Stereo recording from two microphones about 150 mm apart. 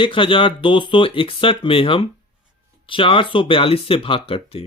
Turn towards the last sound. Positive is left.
turn(degrees=40)  # may be behind; listen again after turning